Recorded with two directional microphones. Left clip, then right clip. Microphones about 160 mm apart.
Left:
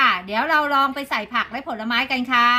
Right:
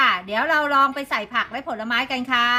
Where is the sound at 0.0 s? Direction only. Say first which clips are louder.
Left 1 dB; 15° right (ahead or behind).